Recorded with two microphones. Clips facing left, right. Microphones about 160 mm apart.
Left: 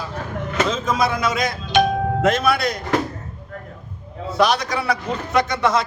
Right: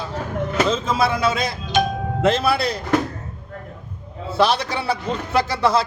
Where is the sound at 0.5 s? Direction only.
30° right (ahead or behind).